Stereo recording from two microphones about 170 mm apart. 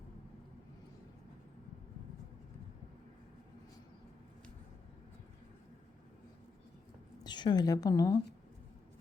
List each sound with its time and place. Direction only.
7.3 s a woman's voice: 25° left (ahead or behind)